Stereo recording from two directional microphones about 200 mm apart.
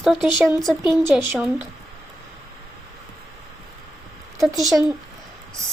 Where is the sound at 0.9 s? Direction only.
10° right (ahead or behind).